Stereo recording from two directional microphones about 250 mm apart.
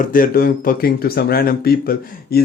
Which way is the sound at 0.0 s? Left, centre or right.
Left.